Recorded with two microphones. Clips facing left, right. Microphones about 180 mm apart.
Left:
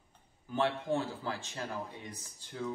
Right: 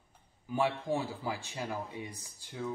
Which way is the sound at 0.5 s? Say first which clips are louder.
Even; 10° right (ahead or behind).